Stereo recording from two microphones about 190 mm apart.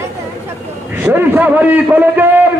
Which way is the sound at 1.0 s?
10° right (ahead or behind).